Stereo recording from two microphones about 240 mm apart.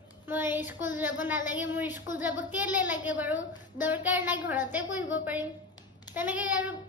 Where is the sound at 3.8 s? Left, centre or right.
Centre.